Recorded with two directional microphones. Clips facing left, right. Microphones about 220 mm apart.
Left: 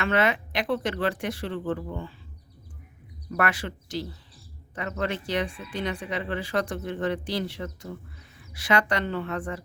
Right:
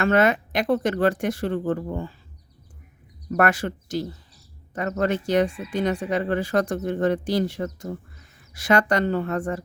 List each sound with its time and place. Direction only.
0.0 s speech: 45° right (ahead or behind)
3.2 s speech: 45° right (ahead or behind)